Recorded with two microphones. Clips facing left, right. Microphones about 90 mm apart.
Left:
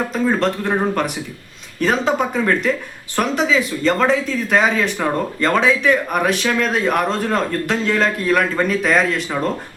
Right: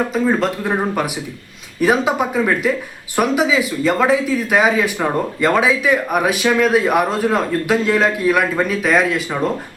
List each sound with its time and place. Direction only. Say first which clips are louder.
0.1 s speech: right 1 dB; 5° right (ahead or behind)